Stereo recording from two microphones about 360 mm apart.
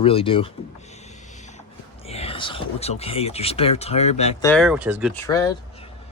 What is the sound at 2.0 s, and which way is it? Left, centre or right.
Speech, centre.